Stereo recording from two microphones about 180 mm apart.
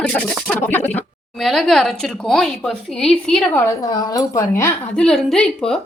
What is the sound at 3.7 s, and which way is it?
Sizzle, 20° left (ahead or behind).